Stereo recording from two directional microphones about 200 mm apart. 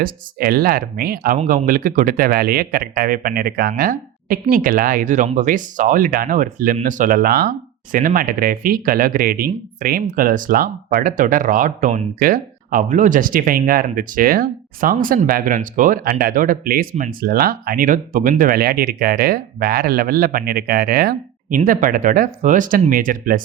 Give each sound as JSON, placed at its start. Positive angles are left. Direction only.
{"t": 0.0, "sound": "speech", "side_deg": -45}